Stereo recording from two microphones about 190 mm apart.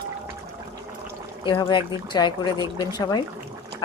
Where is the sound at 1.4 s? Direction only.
25° left (ahead or behind).